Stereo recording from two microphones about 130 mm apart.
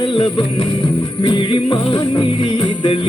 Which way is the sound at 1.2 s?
35° left (ahead or behind).